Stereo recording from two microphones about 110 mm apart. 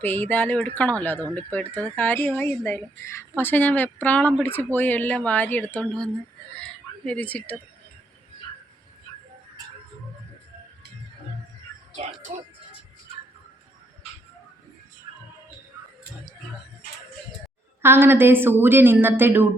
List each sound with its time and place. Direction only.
0.0 s speech: 15° left (ahead or behind)
6.6 s a sound: 10° left (ahead or behind)
17.8 s a woman's voice: 20° right (ahead or behind)